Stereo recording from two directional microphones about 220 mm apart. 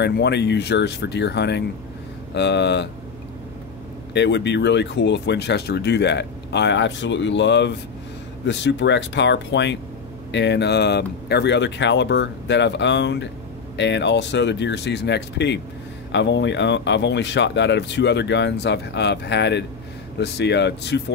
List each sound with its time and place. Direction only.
0.0 s speech: 50° left (ahead or behind)
4.1 s speech: 50° left (ahead or behind)